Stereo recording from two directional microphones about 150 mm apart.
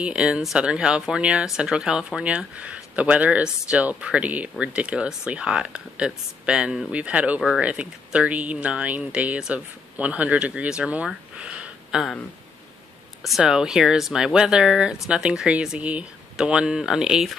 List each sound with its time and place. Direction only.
0.0 s speech: 5° right (ahead or behind)
13.2 s speech: centre (ahead or behind)